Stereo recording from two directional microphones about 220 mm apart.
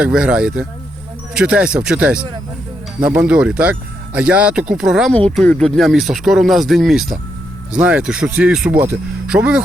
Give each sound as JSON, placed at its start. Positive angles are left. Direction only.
{"t": 0.0, "sound": "speech", "side_deg": -5}